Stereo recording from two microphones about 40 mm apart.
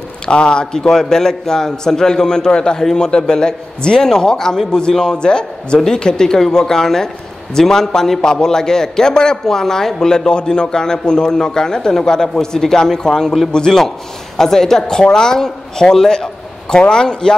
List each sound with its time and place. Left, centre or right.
0.3 s a man's voice: left